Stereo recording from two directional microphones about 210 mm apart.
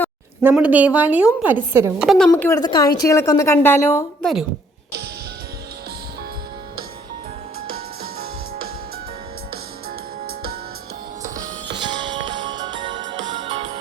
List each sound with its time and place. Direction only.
0.4 s a woman's voice: 5° right (ahead or behind)
2.0 s a woman's voice: 5° left (ahead or behind)
10.2 s music: 45° right (ahead or behind)
11.7 s music: 20° right (ahead or behind)